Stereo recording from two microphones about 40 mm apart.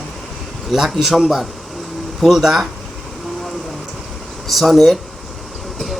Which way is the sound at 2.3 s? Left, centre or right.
Centre.